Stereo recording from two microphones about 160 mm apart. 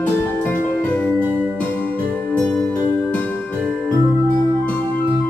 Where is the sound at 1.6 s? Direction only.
10° left (ahead or behind).